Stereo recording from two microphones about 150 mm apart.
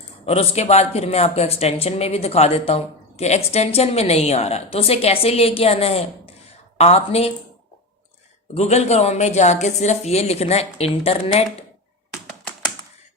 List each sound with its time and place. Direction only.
0.3 s speech: 45° left (ahead or behind)
8.5 s speech: 45° left (ahead or behind)